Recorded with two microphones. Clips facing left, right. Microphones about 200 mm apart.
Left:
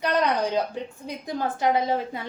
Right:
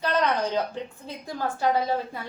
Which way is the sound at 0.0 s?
15° left (ahead or behind).